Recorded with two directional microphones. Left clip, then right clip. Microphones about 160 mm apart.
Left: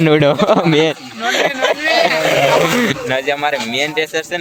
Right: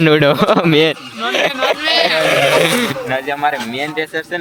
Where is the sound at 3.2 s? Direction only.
15° left (ahead or behind).